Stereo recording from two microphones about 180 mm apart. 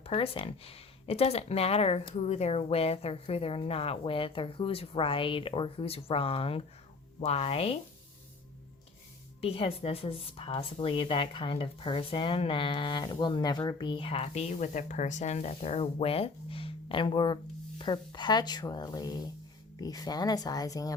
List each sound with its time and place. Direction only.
0.0 s speech: 30° left (ahead or behind)
9.4 s a woman's voice: 35° left (ahead or behind)